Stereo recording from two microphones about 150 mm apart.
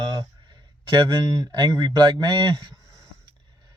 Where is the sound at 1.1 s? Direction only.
25° right (ahead or behind).